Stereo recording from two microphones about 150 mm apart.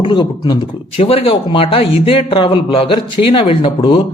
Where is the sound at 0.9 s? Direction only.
40° left (ahead or behind).